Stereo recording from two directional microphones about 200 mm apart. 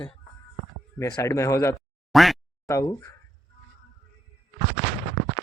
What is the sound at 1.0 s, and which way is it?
Speech, 15° left (ahead or behind).